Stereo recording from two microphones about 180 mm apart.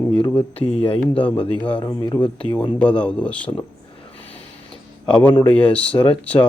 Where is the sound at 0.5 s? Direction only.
35° left (ahead or behind).